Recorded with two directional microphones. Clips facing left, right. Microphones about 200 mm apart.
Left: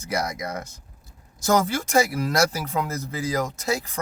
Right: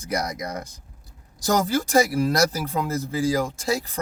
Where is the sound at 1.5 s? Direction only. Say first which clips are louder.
Right 1 dB; 35° right (ahead or behind).